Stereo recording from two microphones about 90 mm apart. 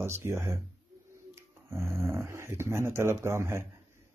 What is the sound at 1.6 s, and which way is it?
Speech, 30° right (ahead or behind).